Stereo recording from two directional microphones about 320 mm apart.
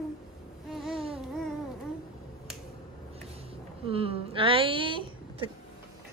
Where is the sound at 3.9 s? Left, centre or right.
Centre.